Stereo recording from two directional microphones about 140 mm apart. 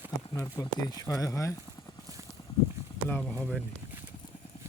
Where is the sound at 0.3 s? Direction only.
25° left (ahead or behind).